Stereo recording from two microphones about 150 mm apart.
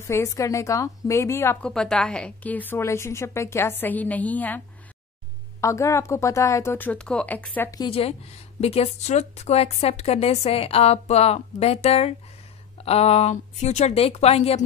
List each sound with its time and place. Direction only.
0.0 s a woman's voice: 20° left (ahead or behind)
1.7 s a woman's voice: 5° left (ahead or behind)
5.6 s a woman's voice: 20° left (ahead or behind)
7.9 s speech: 40° left (ahead or behind)